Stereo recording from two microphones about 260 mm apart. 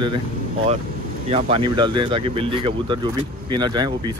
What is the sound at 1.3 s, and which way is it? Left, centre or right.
Speech, right.